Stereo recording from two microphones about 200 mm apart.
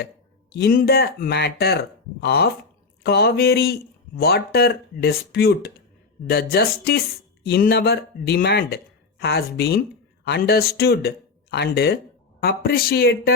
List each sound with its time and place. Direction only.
0.5 s speech: 50° left (ahead or behind)